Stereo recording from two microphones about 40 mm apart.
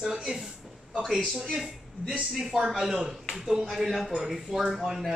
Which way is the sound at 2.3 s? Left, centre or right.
Centre.